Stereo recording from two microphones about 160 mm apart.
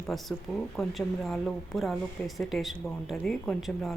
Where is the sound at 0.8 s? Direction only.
Centre (ahead or behind).